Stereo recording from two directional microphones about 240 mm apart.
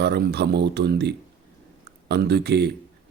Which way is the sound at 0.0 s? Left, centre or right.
Right.